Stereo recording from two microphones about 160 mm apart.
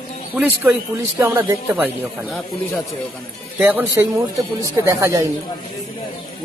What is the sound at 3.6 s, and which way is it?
Speech, 10° right (ahead or behind).